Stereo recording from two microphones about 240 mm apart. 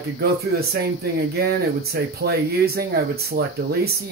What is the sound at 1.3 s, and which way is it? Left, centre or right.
Speech, right.